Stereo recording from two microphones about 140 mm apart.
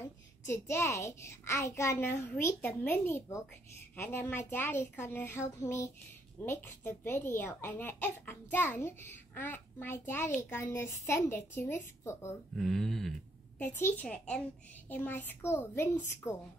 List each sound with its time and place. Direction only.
0.5 s a child's voice: 20° left (ahead or behind)
12.5 s speech: centre (ahead or behind)
13.6 s a child's voice: 15° left (ahead or behind)